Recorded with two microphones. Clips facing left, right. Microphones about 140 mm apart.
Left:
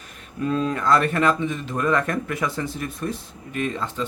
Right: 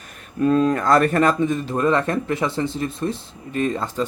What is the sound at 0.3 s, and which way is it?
Speech, 50° right (ahead or behind).